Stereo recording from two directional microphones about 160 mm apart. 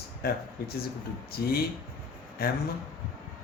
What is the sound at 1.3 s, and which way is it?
Speech, 75° left (ahead or behind).